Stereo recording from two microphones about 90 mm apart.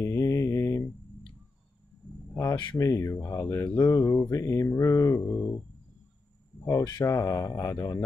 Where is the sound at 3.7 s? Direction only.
45° left (ahead or behind).